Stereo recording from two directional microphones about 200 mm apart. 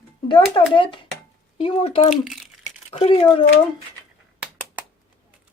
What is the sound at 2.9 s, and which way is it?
Speech, 30° left (ahead or behind).